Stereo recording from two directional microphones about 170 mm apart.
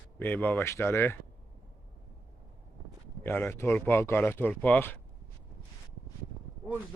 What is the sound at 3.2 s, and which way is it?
Speech, 10° left (ahead or behind).